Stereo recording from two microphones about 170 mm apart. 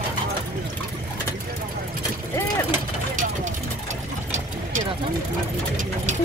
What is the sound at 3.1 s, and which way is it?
Vehicle, 50° right (ahead or behind).